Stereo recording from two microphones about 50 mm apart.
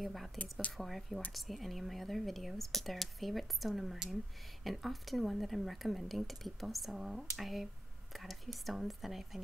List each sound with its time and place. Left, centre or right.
0.0 s speech: centre
0.4 s speech: left
0.7 s speech: centre